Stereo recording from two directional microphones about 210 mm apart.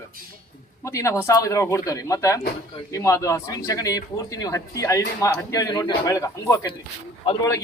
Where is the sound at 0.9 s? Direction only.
15° left (ahead or behind).